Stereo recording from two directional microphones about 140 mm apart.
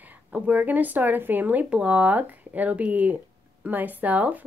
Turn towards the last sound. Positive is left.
turn(degrees=-10)  # may be behind; listen again after turning